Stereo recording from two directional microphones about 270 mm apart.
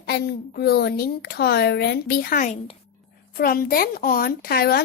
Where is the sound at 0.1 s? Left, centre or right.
Left.